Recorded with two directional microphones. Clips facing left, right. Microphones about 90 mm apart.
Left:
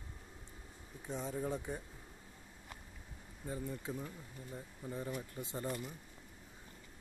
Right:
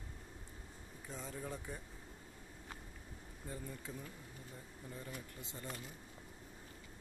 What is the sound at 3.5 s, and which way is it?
Speech, 20° left (ahead or behind).